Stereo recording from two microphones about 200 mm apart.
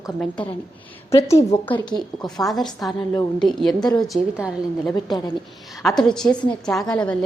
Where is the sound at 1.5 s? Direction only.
10° left (ahead or behind).